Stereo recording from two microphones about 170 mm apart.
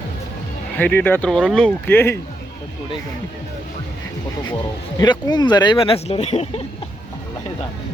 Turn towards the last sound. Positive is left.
turn(degrees=40)  # may be behind; listen again after turning